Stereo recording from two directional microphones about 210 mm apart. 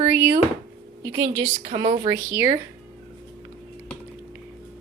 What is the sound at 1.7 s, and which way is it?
Speech, 25° right (ahead or behind).